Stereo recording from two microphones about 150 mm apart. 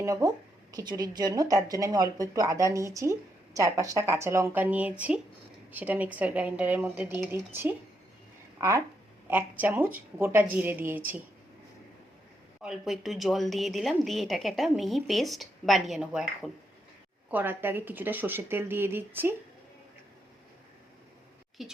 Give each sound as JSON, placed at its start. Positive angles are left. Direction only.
{"t": 0.0, "sound": "a woman's voice", "side_deg": -20}
{"t": 9.2, "sound": "speech", "side_deg": -10}
{"t": 12.6, "sound": "a woman's voice", "side_deg": -5}
{"t": 17.3, "sound": "speech", "side_deg": -15}
{"t": 21.6, "sound": "a woman's voice", "side_deg": 0}